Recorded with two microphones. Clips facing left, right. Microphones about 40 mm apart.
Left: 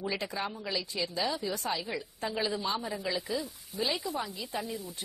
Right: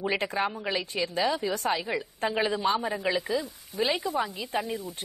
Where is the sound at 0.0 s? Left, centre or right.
Right.